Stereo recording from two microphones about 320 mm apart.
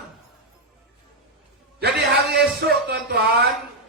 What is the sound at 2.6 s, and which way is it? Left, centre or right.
Speech, right.